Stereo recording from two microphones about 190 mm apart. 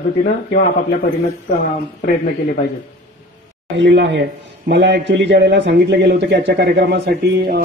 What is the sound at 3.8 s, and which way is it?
A man's voice, 70° right (ahead or behind).